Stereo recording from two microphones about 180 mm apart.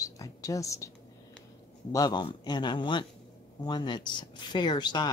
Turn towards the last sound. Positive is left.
turn(degrees=25)  # may be behind; listen again after turning